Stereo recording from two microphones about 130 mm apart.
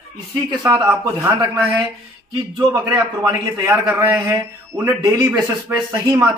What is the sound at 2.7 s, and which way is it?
A man's voice, 25° right (ahead or behind).